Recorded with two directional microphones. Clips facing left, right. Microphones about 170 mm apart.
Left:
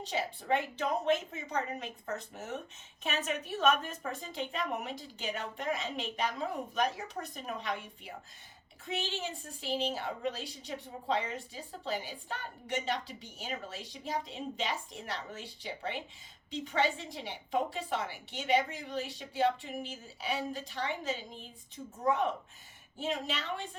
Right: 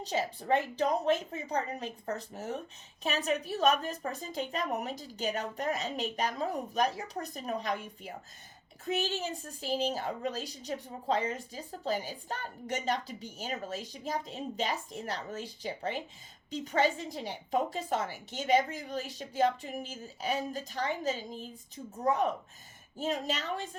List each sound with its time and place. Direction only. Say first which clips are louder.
0.0 s a woman's voice: right 3 dB; 40° right (ahead or behind)